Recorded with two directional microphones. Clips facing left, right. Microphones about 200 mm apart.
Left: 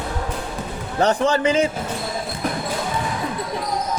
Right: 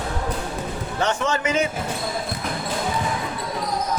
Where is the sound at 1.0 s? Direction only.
35° left (ahead or behind).